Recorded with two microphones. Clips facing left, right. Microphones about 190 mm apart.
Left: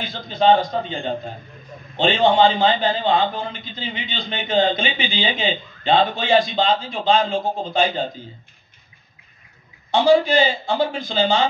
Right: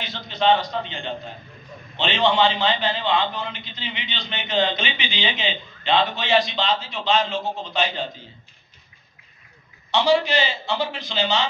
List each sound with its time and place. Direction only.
0.1 s a man's voice: 50° left (ahead or behind)
9.8 s a man's voice: 50° left (ahead or behind)